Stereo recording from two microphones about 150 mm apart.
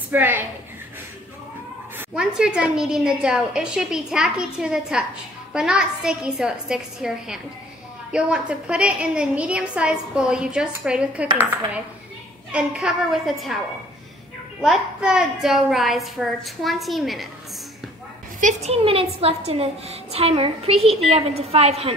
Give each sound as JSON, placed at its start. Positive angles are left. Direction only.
{"t": 0.1, "sound": "a woman's voice", "side_deg": -15}
{"t": 2.0, "sound": "a woman's voice", "side_deg": -5}
{"t": 12.5, "sound": "a woman's voice", "side_deg": -5}
{"t": 14.6, "sound": "a woman's voice", "side_deg": -5}
{"t": 18.4, "sound": "a woman's voice", "side_deg": -50}